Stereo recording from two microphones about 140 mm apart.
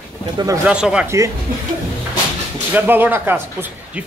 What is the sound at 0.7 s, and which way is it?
Speech, 5° right (ahead or behind).